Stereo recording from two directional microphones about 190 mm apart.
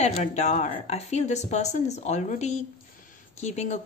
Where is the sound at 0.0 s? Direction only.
35° left (ahead or behind).